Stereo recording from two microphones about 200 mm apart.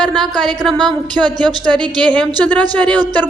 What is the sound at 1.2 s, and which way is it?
Speech, 20° right (ahead or behind).